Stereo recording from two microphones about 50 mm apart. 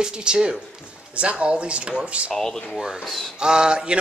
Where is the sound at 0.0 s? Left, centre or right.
Centre.